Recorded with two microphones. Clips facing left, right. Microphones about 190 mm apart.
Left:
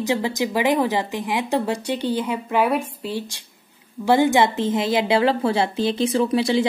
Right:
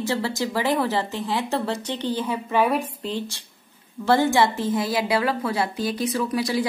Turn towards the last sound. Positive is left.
turn(degrees=25)  # may be behind; listen again after turning